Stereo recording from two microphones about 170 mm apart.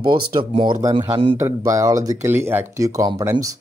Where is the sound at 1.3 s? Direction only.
15° right (ahead or behind).